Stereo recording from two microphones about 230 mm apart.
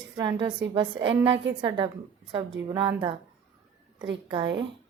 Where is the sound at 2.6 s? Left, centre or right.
Centre.